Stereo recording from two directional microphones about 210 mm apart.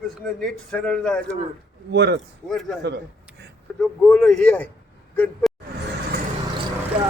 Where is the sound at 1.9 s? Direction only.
55° right (ahead or behind).